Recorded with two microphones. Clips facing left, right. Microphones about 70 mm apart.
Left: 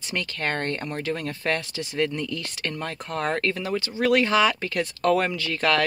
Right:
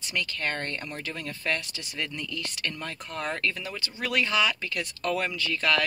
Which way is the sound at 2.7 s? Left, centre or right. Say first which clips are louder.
Left 6 dB; left.